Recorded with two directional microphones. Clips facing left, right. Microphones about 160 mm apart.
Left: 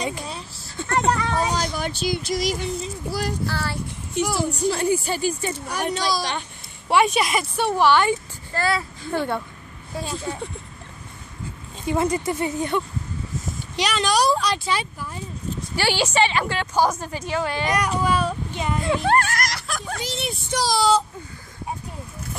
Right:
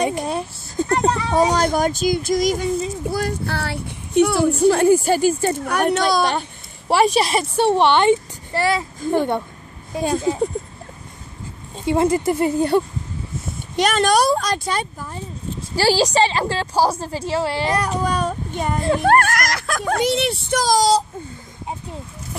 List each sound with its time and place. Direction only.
0.2 s a sound: 55° right (ahead or behind)
0.8 s a woman's voice: 40° right (ahead or behind)
1.1 s a sound: 30° right (ahead or behind)
1.5 s a woman's voice: 50° right (ahead or behind)
5.6 s speech: 60° right (ahead or behind)
6.9 s a child's voice: 35° right (ahead or behind); by 10.1 s 15° right (ahead or behind)
11.8 s speech: 25° right (ahead or behind)
13.7 s a woman's voice: 50° right (ahead or behind); by 20.5 s 65° right (ahead or behind)
20.5 s speech: 45° right (ahead or behind)